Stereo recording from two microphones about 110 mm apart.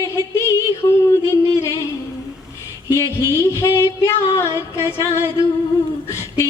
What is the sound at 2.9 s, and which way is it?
Music, 25° left (ahead or behind).